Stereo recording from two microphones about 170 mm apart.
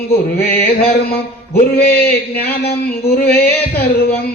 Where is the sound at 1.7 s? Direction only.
65° left (ahead or behind).